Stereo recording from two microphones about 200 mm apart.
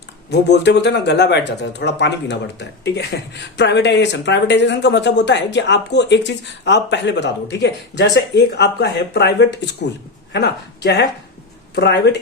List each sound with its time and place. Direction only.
0.3 s speech: 60° left (ahead or behind)